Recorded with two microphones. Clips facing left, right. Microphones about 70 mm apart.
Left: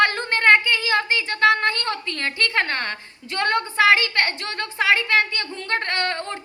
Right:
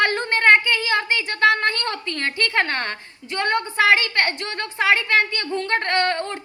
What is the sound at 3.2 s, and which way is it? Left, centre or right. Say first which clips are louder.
A woman's voice: even; right.